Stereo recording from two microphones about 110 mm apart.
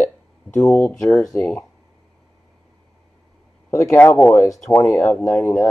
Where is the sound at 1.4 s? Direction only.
25° left (ahead or behind).